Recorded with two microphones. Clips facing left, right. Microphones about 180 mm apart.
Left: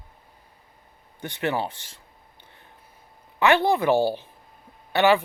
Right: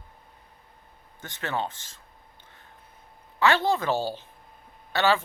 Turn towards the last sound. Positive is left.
turn(degrees=15)  # may be behind; listen again after turning